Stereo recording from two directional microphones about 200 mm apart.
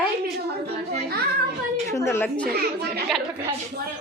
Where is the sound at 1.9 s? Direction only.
15° left (ahead or behind).